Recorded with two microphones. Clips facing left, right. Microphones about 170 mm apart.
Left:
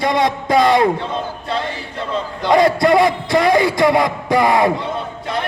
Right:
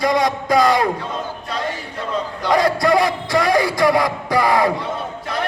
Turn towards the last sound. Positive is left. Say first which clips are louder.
# left 2 dB
turn(degrees=25)  # may be behind; listen again after turning